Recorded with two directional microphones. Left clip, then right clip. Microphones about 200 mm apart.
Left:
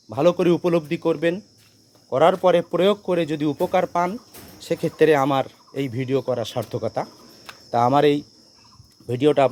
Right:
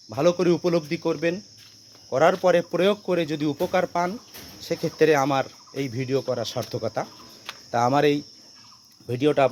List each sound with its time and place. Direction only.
0.1 s speech: 20° left (ahead or behind)
4.6 s speech: 25° left (ahead or behind)